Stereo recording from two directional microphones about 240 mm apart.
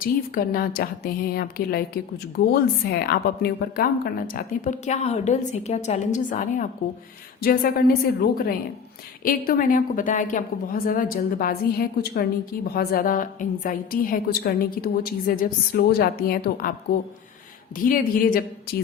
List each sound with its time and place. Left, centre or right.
0.0 s a woman's voice: left
17.7 s a woman's voice: left